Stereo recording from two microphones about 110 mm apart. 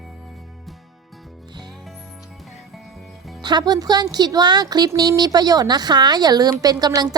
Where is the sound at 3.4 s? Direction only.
40° right (ahead or behind).